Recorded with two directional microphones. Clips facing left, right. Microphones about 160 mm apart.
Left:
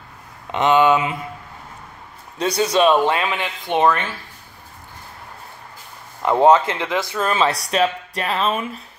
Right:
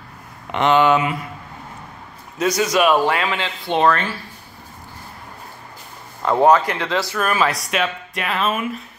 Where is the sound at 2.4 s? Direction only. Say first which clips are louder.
Even; 30° left (ahead or behind).